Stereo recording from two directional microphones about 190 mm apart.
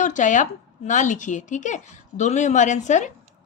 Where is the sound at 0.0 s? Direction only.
40° left (ahead or behind).